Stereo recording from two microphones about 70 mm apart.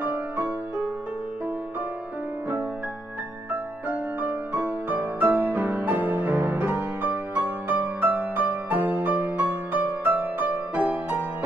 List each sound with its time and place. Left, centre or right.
0.0 s music: right
3.9 s music: right